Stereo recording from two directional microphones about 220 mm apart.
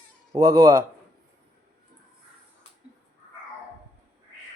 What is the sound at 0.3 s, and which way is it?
Speech, 15° right (ahead or behind).